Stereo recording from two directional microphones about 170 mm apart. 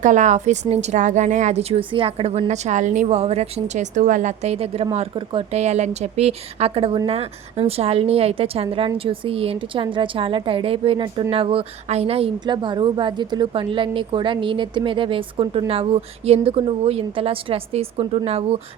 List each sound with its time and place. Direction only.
0.0 s a woman's voice: 45° right (ahead or behind)